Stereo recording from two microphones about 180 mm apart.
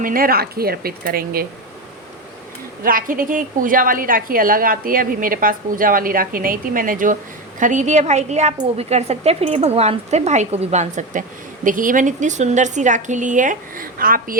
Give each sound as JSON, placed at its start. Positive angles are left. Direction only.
{"t": 0.0, "sound": "speech", "side_deg": -50}
{"t": 2.8, "sound": "a woman's voice", "side_deg": -50}